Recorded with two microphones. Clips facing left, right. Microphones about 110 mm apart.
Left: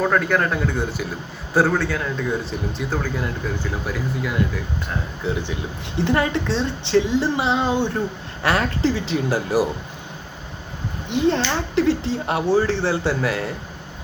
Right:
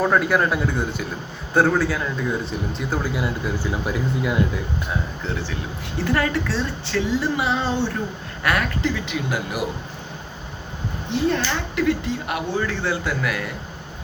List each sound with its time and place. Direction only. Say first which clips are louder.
0.0 s a man's voice: right 1 dB; 5° right (ahead or behind)
3.0 s speech: right 1 dB; 10° right (ahead or behind)
5.2 s speech: left 3 dB; 20° left (ahead or behind)
8.4 s speech: left 2 dB; 30° left (ahead or behind)
11.3 s speech: left 3 dB; 30° left (ahead or behind)